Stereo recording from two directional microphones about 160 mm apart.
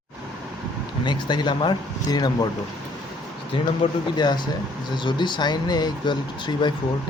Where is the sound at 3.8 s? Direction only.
35° left (ahead or behind).